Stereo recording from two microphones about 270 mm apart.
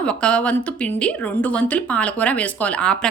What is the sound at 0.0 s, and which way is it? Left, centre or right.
A woman's voice, centre.